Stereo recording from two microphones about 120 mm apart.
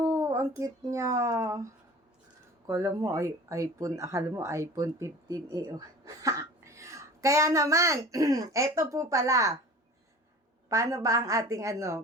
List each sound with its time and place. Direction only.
0.0 s speech: 30° right (ahead or behind)
10.7 s speech: 25° right (ahead or behind)